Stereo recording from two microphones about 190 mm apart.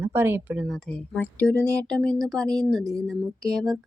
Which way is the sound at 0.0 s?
10° right (ahead or behind).